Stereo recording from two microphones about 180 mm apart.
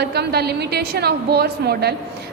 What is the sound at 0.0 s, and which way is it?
A woman's voice, 65° right (ahead or behind).